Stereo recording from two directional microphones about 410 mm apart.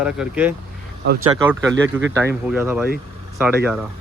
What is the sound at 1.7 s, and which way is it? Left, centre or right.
Speech, right.